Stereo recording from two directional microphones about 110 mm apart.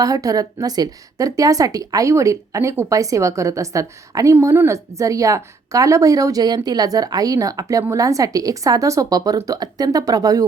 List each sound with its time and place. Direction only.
0.0 s a woman's voice: 30° right (ahead or behind)